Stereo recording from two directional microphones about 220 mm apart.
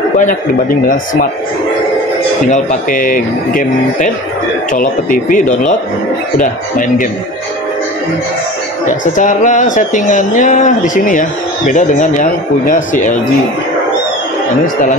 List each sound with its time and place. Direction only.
2.5 s speech: 35° left (ahead or behind)
8.8 s speech: 35° left (ahead or behind)